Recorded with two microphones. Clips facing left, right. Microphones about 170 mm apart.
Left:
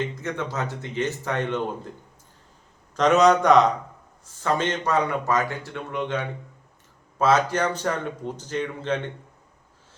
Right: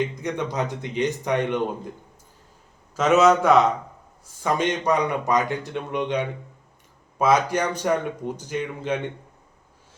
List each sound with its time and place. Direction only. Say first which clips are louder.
0.0 s a man's voice: right 3 dB; 15° right (ahead or behind)
2.9 s a man's voice: even; 5° right (ahead or behind)